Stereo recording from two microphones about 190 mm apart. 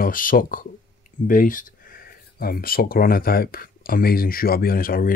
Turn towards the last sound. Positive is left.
turn(degrees=50)  # may be behind; listen again after turning